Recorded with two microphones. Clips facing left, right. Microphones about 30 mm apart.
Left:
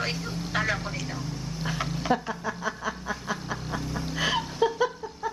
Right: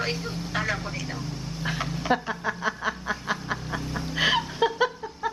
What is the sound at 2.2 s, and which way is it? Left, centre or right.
Snicker, right.